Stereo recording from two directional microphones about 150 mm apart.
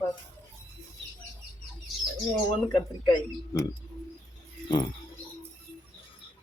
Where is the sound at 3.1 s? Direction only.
25° left (ahead or behind).